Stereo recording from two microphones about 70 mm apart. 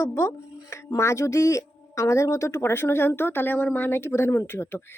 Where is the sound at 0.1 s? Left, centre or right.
Left.